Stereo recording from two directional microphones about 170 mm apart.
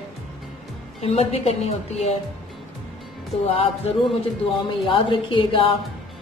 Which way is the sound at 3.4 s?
35° left (ahead or behind).